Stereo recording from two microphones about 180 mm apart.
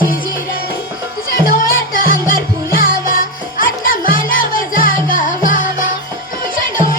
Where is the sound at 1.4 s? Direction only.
50° left (ahead or behind).